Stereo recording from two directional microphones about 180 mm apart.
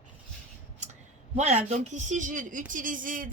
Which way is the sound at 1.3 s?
40° right (ahead or behind).